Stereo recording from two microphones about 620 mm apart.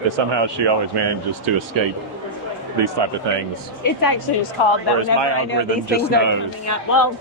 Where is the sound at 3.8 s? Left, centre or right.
Left.